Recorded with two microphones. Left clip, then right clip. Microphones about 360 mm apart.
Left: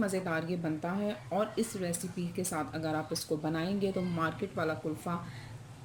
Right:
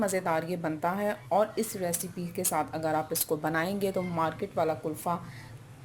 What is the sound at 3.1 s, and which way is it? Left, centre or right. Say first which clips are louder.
Speech: right 5 dB; centre.